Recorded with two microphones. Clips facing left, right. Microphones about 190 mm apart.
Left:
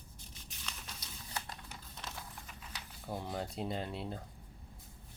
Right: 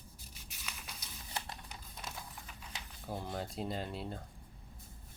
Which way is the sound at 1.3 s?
15° right (ahead or behind).